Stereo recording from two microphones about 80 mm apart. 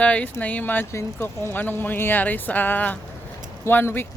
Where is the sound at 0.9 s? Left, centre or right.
Left.